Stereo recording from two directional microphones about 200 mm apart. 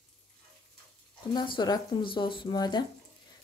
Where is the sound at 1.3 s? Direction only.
20° left (ahead or behind).